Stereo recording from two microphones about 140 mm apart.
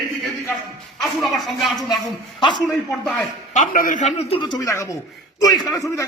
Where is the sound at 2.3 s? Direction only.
35° left (ahead or behind).